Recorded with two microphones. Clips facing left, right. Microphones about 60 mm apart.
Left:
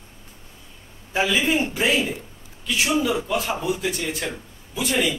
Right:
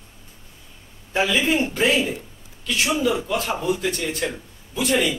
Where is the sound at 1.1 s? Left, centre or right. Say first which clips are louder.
Right 1 dB; centre.